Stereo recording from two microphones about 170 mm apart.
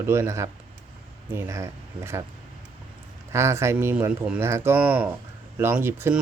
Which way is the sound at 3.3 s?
15° right (ahead or behind).